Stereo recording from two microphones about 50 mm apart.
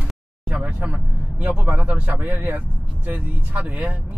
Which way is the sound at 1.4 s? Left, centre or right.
Right.